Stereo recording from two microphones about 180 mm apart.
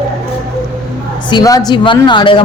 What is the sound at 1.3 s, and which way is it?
Speech, 20° left (ahead or behind).